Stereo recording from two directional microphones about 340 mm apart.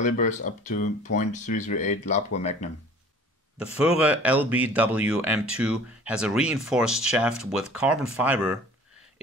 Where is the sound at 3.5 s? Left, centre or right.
Centre.